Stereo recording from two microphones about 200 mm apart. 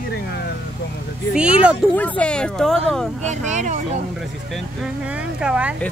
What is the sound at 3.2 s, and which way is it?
Speech, 40° right (ahead or behind).